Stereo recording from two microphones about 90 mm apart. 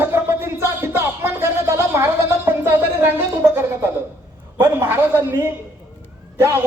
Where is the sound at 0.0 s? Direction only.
25° right (ahead or behind).